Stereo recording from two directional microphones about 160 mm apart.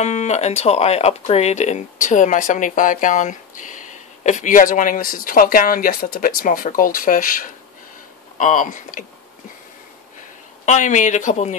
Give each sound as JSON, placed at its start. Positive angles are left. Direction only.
{"t": 0.0, "sound": "speech", "side_deg": 45}
{"t": 10.6, "sound": "speech", "side_deg": 50}